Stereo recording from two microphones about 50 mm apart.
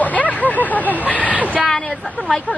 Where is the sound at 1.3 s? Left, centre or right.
Right.